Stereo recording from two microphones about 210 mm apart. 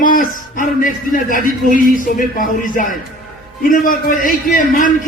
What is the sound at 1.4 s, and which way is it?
Speech, 40° right (ahead or behind).